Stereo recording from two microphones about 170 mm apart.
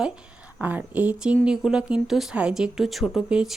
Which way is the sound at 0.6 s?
10° right (ahead or behind).